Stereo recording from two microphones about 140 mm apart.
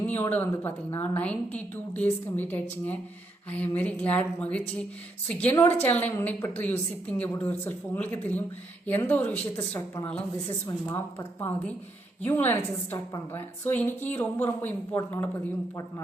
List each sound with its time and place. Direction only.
0.0 s a woman's voice: 15° left (ahead or behind)